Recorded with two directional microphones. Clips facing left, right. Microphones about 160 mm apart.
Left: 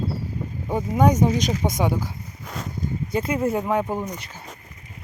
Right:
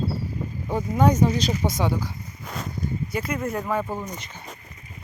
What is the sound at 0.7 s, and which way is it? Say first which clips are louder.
Speech: left 1 dB; 10° left (ahead or behind).